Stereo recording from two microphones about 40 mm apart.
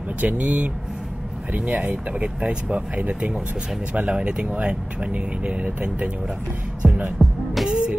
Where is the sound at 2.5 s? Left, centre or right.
Right.